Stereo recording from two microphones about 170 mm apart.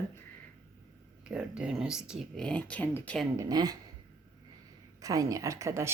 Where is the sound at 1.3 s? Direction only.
5° right (ahead or behind).